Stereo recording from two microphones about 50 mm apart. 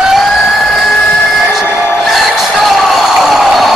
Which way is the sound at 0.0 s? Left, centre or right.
Centre.